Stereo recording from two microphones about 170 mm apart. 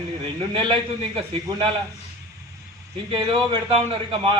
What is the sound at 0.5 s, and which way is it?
A man's voice, 30° right (ahead or behind).